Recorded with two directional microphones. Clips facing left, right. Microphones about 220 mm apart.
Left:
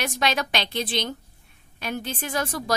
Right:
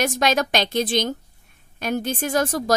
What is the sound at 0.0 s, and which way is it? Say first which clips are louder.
A woman's voice: right 5 dB; 45° right (ahead or behind).